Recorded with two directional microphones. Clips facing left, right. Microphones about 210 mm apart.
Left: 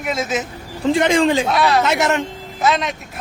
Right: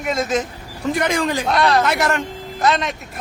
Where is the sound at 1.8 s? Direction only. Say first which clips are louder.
Left 2 dB; 20° left (ahead or behind).